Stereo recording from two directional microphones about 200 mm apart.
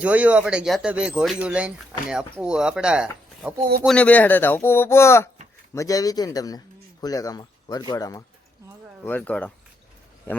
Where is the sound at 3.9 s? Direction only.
5° left (ahead or behind).